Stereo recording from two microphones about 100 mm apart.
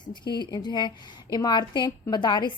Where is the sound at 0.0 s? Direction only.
50° left (ahead or behind).